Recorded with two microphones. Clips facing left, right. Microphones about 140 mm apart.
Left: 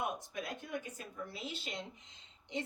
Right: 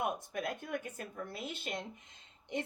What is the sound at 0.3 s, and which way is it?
A woman's voice, 55° right (ahead or behind).